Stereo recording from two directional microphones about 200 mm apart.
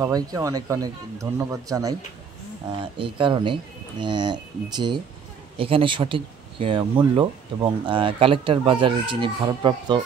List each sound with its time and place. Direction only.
0.0 s speech: 15° right (ahead or behind)
3.0 s speech: 25° right (ahead or behind)